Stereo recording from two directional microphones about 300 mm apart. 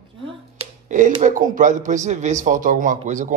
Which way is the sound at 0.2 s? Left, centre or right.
Right.